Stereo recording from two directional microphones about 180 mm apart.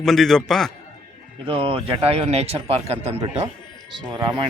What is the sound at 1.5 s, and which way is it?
Speech, 30° right (ahead or behind).